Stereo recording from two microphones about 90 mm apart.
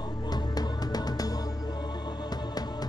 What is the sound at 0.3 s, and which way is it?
Music, 45° left (ahead or behind).